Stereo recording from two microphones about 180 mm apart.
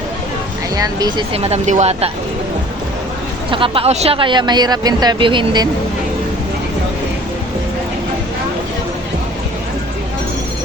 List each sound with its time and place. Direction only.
0.8 s speech: 20° right (ahead or behind); by 2.0 s 35° right (ahead or behind)
3.5 s speech: 30° right (ahead or behind)